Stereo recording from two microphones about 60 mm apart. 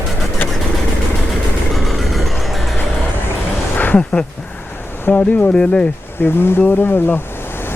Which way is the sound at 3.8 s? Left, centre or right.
Left.